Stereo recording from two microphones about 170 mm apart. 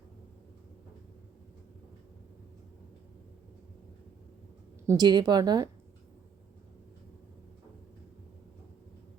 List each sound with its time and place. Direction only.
4.9 s speech: 25° right (ahead or behind)